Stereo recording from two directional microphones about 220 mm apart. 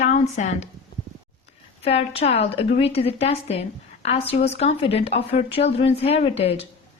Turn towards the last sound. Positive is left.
turn(degrees=25)  # may be behind; listen again after turning